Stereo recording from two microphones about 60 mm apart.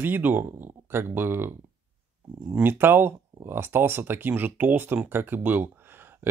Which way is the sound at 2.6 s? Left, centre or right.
Right.